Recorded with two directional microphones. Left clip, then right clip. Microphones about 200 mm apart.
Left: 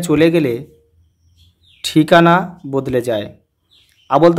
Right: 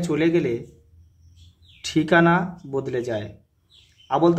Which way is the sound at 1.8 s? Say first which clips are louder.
Left 8 dB; 45° left (ahead or behind).